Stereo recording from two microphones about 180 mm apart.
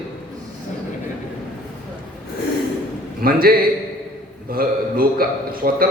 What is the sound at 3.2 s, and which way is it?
A man's voice, 55° right (ahead or behind).